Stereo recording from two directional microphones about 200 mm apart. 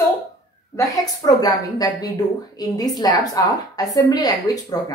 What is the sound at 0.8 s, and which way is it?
A woman's voice, 15° left (ahead or behind).